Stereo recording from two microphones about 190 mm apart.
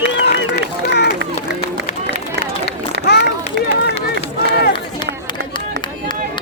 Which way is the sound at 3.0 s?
60° left (ahead or behind).